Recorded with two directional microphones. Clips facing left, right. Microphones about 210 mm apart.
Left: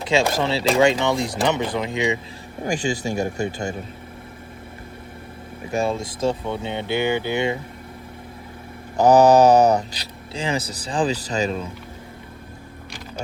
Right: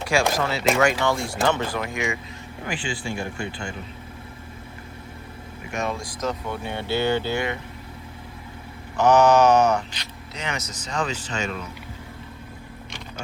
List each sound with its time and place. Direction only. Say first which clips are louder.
0.0 s speech: left 2 dB; 20° left (ahead or behind)
2.6 s speech: left 6 dB; 40° left (ahead or behind)
5.7 s speech: left 5 dB; 30° left (ahead or behind)
9.0 s speech: left 3 dB; 35° left (ahead or behind)